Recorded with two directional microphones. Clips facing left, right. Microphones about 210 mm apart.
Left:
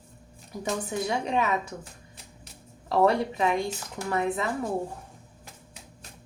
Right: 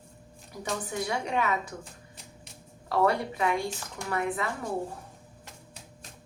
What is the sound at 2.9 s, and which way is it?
A woman's voice, 20° left (ahead or behind).